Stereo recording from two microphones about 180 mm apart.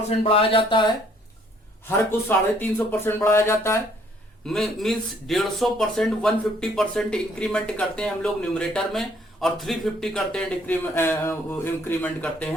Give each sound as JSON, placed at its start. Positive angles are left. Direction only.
{"t": 0.2, "sound": "speech", "side_deg": 30}
{"t": 2.6, "sound": "speech", "side_deg": 10}
{"t": 4.4, "sound": "speech", "side_deg": 0}